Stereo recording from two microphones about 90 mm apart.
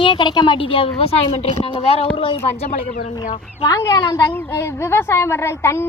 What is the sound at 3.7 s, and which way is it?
Speech, 40° left (ahead or behind).